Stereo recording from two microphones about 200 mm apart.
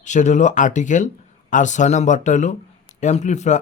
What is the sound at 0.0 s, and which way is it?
Speech, 35° left (ahead or behind).